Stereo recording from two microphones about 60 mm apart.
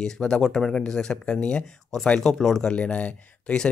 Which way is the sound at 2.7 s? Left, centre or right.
Centre.